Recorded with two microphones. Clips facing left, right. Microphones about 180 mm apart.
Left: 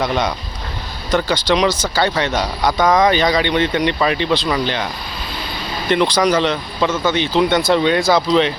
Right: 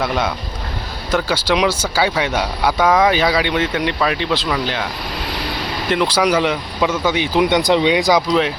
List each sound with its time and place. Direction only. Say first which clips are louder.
0.0 s speech: left 1 dB; 5° right (ahead or behind)
5.9 s speech: left 1 dB; 5° right (ahead or behind)
8.3 s speech: left 2 dB; 5° right (ahead or behind)